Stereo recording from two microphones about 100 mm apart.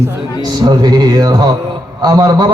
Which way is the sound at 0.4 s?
45° right (ahead or behind).